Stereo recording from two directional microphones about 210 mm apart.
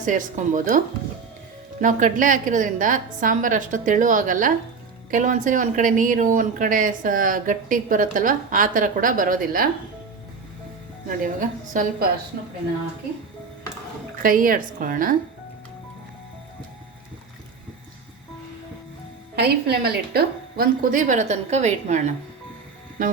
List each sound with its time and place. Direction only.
0.0 s a woman's voice: 35° right (ahead or behind)
1.8 s a woman's voice: 35° right (ahead or behind)
11.3 s a woman's voice: 40° right (ahead or behind)
14.2 s a woman's voice: 40° right (ahead or behind)
19.4 s a woman's voice: 50° right (ahead or behind)